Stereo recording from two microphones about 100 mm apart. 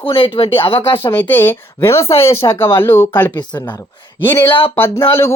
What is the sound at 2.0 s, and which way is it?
Speech, 80° left.